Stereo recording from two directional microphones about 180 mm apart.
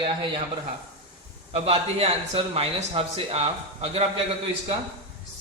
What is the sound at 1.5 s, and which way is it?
A man's voice, 35° right (ahead or behind).